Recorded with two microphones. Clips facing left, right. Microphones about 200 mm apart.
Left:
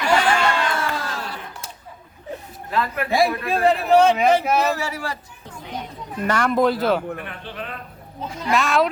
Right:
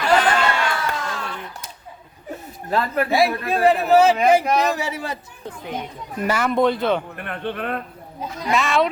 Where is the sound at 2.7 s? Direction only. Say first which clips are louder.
Right 3 dB; 35° right (ahead or behind).